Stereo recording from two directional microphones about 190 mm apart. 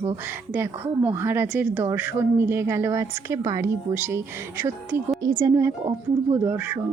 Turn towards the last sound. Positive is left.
turn(degrees=-10)  # may be behind; listen again after turning